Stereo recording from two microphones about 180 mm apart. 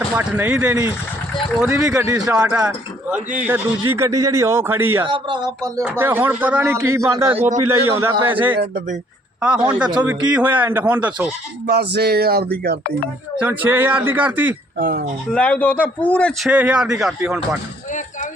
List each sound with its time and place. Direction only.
0.1 s speech: 10° right (ahead or behind)
2.2 s speech: 5° right (ahead or behind)
5.0 s speech: 25° right (ahead or behind)
7.3 s a man's voice: 40° right (ahead or behind)
7.7 s speech: 15° right (ahead or behind)
11.6 s speech: 65° right (ahead or behind)
13.4 s speech: 10° right (ahead or behind)
14.8 s speech: 50° right (ahead or behind)
15.3 s speech: 5° left (ahead or behind)
16.5 s speech: 5° right (ahead or behind)